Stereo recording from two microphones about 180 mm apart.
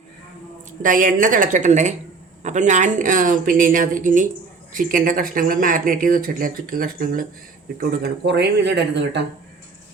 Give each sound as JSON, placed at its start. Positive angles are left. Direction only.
{"t": 0.8, "sound": "speech", "side_deg": -50}